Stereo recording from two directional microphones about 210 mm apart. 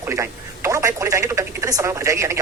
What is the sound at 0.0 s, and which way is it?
Speech, 15° right (ahead or behind).